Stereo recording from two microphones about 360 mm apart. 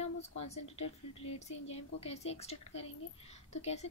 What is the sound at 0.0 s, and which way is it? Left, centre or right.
Speech, centre.